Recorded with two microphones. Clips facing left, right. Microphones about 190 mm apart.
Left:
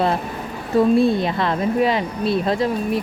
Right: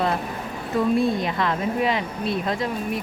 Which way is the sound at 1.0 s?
30° left (ahead or behind).